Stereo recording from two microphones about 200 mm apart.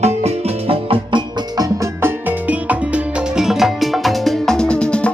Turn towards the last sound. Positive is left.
turn(degrees=5)  # may be behind; listen again after turning